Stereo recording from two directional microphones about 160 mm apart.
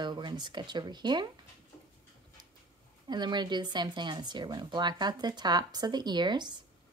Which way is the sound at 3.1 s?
30° right (ahead or behind).